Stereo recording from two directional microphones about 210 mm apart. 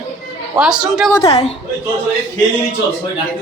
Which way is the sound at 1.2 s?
30° left (ahead or behind).